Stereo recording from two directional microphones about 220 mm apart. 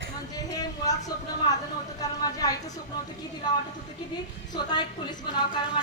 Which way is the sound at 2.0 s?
15° left (ahead or behind).